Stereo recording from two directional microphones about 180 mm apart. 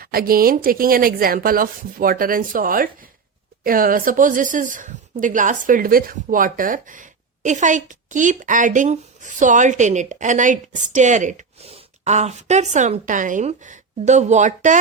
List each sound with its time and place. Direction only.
0.0 s speech: 55° right (ahead or behind)